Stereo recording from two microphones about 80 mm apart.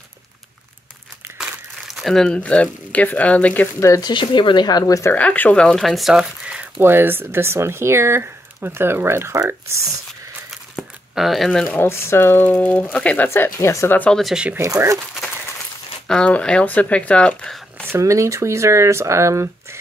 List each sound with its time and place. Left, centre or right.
1.4 s crumpling: centre
2.3 s speech: centre
4.0 s speech: left
5.1 s speech: centre
6.1 s speech: centre
6.8 s speech: right
10.5 s crumpling: centre
11.6 s speech: centre
11.9 s speech: left; by 13.3 s centre
13.3 s speech: left
14.6 s speech: right
16.1 s speech: centre
17.8 s speech: right